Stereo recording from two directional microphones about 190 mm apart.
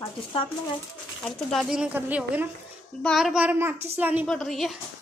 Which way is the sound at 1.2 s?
Centre (ahead or behind).